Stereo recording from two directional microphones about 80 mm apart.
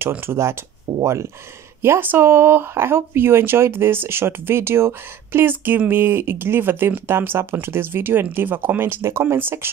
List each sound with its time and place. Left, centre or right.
0.2 s speech: right
0.9 s speech: right
1.8 s speech: right